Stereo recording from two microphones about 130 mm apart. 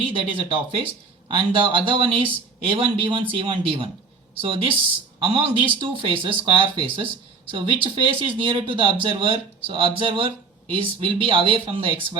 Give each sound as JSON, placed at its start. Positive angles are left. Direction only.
{"t": 0.0, "sound": "speech", "side_deg": -40}